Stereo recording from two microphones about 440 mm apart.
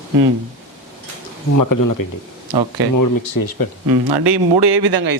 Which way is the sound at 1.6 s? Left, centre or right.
Left.